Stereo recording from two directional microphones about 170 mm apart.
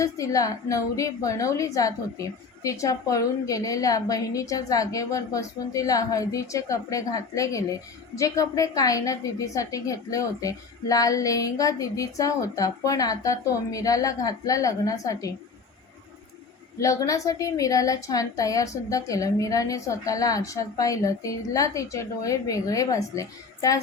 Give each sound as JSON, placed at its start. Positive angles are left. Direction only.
{"t": 0.0, "sound": "a woman's voice", "side_deg": 20}
{"t": 16.8, "sound": "a woman's voice", "side_deg": 20}